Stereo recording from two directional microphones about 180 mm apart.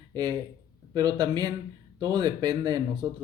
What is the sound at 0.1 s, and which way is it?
Speech, 25° right (ahead or behind).